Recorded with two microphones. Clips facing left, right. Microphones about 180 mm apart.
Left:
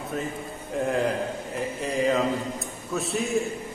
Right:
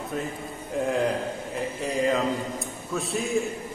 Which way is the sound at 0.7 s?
Centre (ahead or behind).